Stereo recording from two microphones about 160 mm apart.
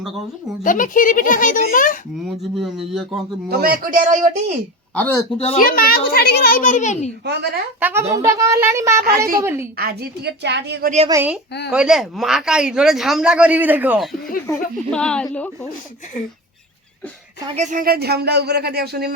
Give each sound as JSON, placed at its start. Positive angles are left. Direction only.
{"t": 0.6, "sound": "a woman's voice", "side_deg": 55}
{"t": 2.4, "sound": "speech", "side_deg": 0}
{"t": 3.5, "sound": "a man's voice", "side_deg": -65}
{"t": 4.9, "sound": "speech", "side_deg": 10}
{"t": 5.5, "sound": "a woman's voice", "side_deg": 65}
{"t": 7.8, "sound": "speech", "side_deg": -10}
{"t": 9.0, "sound": "a woman's voice", "side_deg": -70}
{"t": 9.4, "sound": "speech", "side_deg": -15}
{"t": 9.7, "sound": "speech", "side_deg": -75}
{"t": 11.1, "sound": "speech", "side_deg": -15}
{"t": 14.4, "sound": "speech", "side_deg": 5}
{"t": 17.6, "sound": "speech", "side_deg": -55}